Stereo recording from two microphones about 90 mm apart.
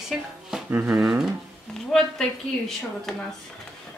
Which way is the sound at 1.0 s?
5° right (ahead or behind).